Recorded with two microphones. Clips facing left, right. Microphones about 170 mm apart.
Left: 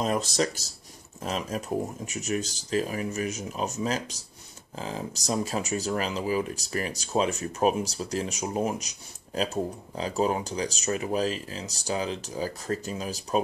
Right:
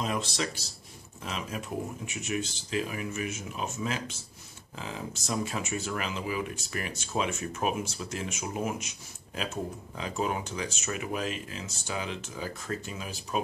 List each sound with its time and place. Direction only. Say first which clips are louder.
0.0 s speech: left 5 dB; 45° left (ahead or behind)